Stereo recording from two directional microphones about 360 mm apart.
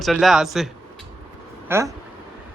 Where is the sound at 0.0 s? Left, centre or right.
Centre.